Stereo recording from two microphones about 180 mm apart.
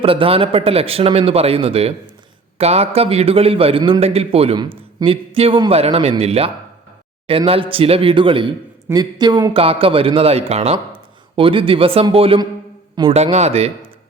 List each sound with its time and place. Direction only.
0.0 s a man's voice: 30° right (ahead or behind)